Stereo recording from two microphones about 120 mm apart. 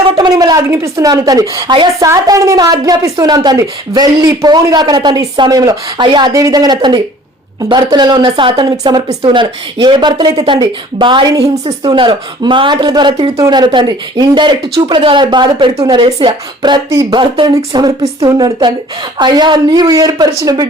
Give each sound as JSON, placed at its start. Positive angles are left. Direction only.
{"t": 0.2, "sound": "a woman's voice", "side_deg": -35}
{"t": 2.0, "sound": "a woman's voice", "side_deg": -25}
{"t": 8.7, "sound": "a woman's voice", "side_deg": -30}